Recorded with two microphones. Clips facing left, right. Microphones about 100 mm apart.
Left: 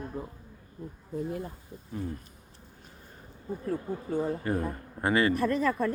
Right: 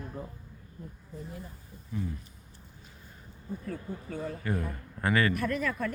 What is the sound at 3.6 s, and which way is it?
A man's voice, 30° left (ahead or behind).